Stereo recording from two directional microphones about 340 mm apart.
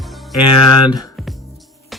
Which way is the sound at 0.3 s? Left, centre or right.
Left.